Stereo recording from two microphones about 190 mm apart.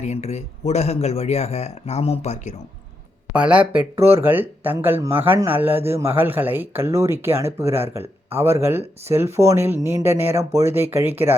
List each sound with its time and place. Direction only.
0.0 s speech: 35° left (ahead or behind)
3.3 s speech: 5° right (ahead or behind)